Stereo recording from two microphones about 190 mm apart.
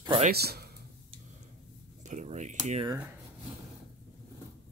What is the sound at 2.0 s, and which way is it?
Speech, 40° right (ahead or behind).